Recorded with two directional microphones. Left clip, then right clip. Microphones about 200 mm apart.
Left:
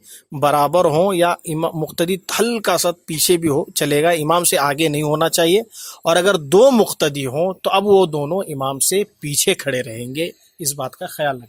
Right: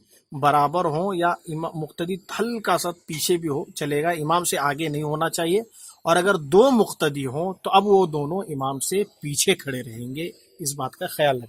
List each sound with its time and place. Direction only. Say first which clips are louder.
0.3 s speech: left 5 dB; 40° left (ahead or behind)
11.0 s speech: right 1 dB; 10° right (ahead or behind)